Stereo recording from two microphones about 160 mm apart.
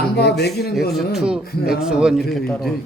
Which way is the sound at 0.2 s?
90° left.